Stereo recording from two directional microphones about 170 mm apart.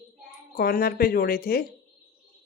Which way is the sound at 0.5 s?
60° left (ahead or behind).